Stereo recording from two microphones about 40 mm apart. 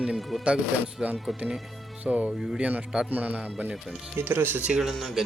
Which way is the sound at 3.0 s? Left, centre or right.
Right.